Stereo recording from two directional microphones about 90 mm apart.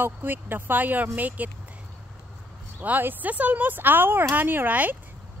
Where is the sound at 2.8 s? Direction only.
20° right (ahead or behind).